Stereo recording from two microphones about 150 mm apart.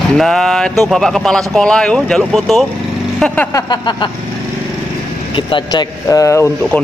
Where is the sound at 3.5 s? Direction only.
30° left (ahead or behind).